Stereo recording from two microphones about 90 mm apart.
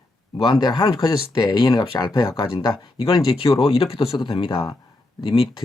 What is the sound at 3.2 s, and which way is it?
Speech, 90° left.